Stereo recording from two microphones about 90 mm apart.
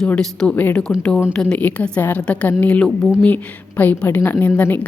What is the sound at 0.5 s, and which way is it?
A woman's voice, 20° left (ahead or behind).